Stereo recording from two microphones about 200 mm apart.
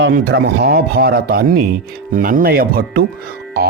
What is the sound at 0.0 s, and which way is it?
Speech, 55° right (ahead or behind).